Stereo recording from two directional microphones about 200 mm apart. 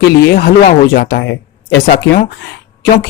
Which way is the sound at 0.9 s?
55° left (ahead or behind).